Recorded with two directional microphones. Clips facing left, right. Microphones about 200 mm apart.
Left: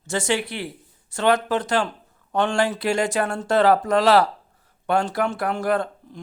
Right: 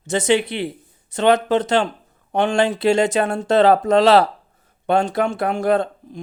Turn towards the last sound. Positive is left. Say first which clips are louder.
# right 4 dB
turn(degrees=-20)  # may be behind; listen again after turning